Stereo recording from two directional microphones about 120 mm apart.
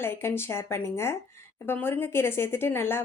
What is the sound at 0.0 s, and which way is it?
A woman's voice, 20° left (ahead or behind).